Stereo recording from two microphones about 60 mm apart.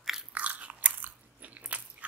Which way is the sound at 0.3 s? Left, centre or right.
Right.